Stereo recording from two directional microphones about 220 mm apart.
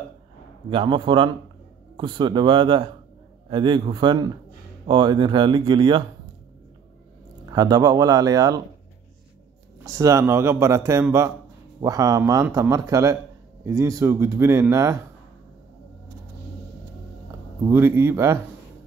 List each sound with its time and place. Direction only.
0.7 s speech: 25° right (ahead or behind)
7.5 s speech: 20° right (ahead or behind)
9.8 s speech: 15° right (ahead or behind)
17.6 s speech: 10° right (ahead or behind)